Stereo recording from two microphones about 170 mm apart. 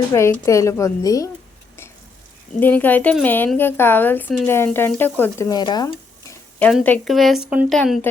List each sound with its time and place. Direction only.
0.1 s a woman's voice: 15° left (ahead or behind)
2.6 s a woman's voice: 10° left (ahead or behind)
6.6 s a woman's voice: 5° left (ahead or behind)